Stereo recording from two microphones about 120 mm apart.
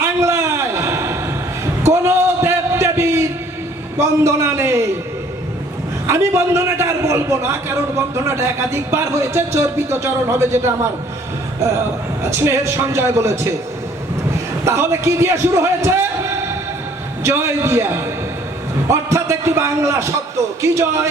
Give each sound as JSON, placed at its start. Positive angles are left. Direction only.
{"t": 0.2, "sound": "a sound", "side_deg": -25}
{"t": 3.9, "sound": "a man's voice", "side_deg": -25}
{"t": 6.1, "sound": "speech", "side_deg": -20}
{"t": 12.3, "sound": "speech", "side_deg": -20}
{"t": 14.6, "sound": "a man's voice", "side_deg": -25}